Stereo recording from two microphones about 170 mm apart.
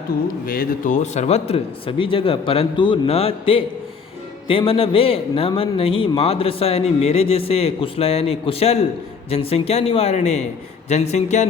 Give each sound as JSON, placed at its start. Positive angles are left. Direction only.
{"t": 0.4, "sound": "a man's voice", "side_deg": 60}